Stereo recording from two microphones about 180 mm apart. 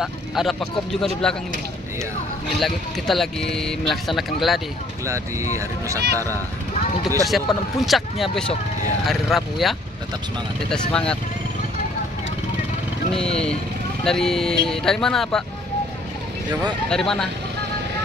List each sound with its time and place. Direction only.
0.0 s speech: centre (ahead or behind)
2.6 s speech: centre (ahead or behind)
5.0 s speech: 15° right (ahead or behind)
7.2 s speech: centre (ahead or behind)
14.0 s speech: centre (ahead or behind)
16.9 s speech: 5° left (ahead or behind)